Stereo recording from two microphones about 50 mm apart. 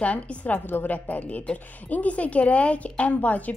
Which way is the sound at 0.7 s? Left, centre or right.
Left.